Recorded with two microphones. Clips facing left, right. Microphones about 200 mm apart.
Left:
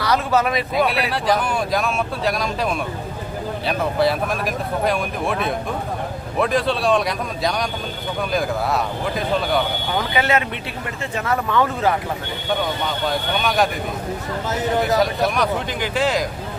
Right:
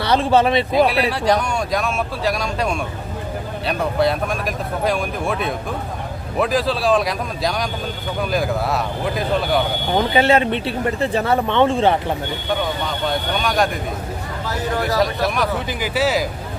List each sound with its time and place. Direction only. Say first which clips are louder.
0.0 s speech: right 3 dB; 30° right (ahead or behind)
0.9 s speech: right 2 dB; centre (ahead or behind)
9.9 s speech: right 5 dB; 30° right (ahead or behind)
13.1 s speech: right 1 dB; centre (ahead or behind)
14.9 s speech: even; centre (ahead or behind)